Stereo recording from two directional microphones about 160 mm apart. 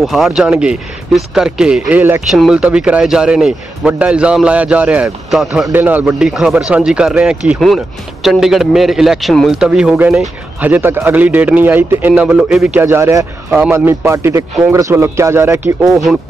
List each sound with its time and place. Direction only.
0.0 s a man's voice: centre (ahead or behind)
15.9 s a man's voice: centre (ahead or behind)